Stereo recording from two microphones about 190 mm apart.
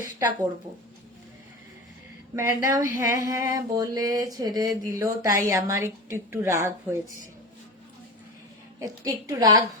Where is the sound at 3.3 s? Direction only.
20° right (ahead or behind).